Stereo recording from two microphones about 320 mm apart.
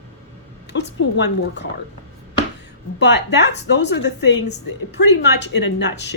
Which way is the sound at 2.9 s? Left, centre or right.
Left.